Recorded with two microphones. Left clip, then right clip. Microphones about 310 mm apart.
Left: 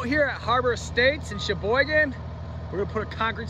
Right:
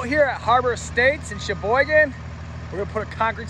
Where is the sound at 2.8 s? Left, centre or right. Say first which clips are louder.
Right 4 dB; centre.